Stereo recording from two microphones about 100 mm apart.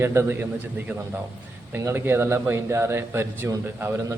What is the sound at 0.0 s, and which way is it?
Speech, 25° right (ahead or behind).